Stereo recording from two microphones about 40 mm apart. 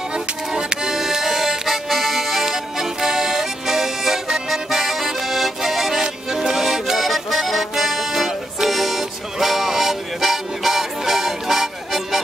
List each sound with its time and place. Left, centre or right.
0.1 s music: centre